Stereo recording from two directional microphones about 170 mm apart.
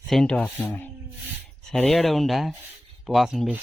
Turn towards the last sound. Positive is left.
turn(degrees=0)  # may be behind; listen again after turning